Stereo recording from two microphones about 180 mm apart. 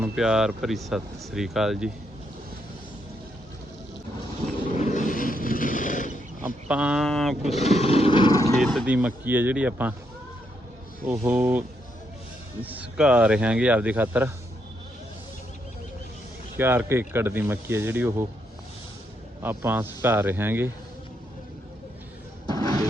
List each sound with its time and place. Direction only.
0.0 s speech: 5° right (ahead or behind)
4.8 s vehicle: 45° left (ahead or behind)
6.7 s speech: 5° right (ahead or behind)
7.5 s speech: 35° left (ahead or behind); by 8.5 s 20° left (ahead or behind)
8.6 s speech: centre (ahead or behind)
11.0 s speech: 10° right (ahead or behind)
12.6 s speech: 10° right (ahead or behind)
16.6 s speech: 10° right (ahead or behind)
19.4 s speech: 10° right (ahead or behind)
22.4 s music: 20° left (ahead or behind)